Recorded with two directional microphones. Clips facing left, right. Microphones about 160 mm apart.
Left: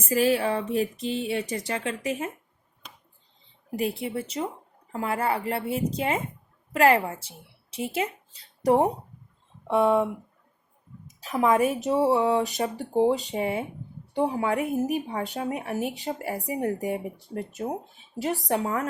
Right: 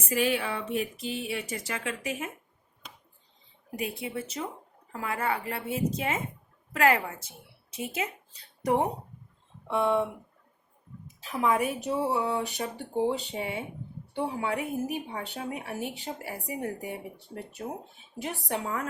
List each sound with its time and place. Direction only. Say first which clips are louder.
0.1 s speech: left 5 dB; 40° left (ahead or behind)
3.8 s speech: left 5 dB; 30° left (ahead or behind)
11.2 s speech: left 5 dB; 40° left (ahead or behind)